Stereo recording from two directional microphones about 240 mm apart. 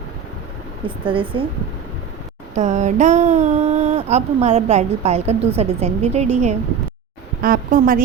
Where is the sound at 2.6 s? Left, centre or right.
Right.